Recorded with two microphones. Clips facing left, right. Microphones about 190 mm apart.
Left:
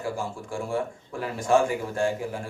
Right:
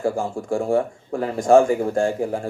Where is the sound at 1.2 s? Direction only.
40° right (ahead or behind).